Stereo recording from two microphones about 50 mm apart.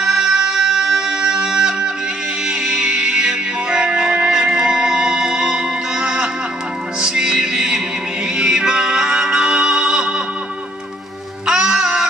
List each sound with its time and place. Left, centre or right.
0.0 s music: centre
11.4 s music: centre